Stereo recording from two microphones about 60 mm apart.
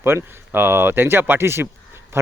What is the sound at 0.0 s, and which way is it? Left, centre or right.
Speech, right.